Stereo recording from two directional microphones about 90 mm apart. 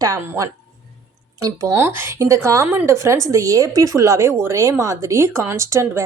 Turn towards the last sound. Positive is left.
turn(degrees=-35)  # may be behind; listen again after turning